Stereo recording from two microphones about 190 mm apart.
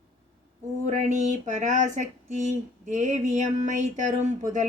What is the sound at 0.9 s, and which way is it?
Speech, 40° right (ahead or behind).